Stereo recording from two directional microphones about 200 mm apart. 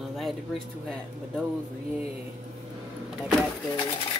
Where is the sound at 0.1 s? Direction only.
Centre (ahead or behind).